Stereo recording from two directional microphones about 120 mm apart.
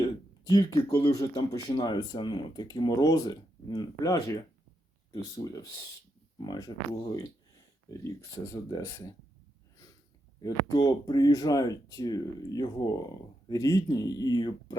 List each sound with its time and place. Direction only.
0.0 s speech: 35° left (ahead or behind)
10.4 s speech: 30° left (ahead or behind)